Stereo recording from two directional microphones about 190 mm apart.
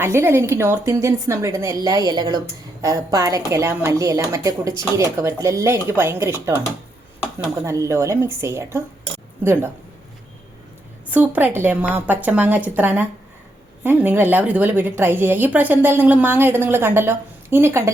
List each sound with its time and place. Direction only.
0.0 s a woman's voice: 15° right (ahead or behind)
11.1 s a woman's voice: 10° right (ahead or behind)